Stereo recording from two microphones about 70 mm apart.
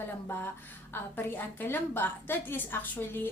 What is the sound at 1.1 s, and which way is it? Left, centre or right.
A woman's voice, left.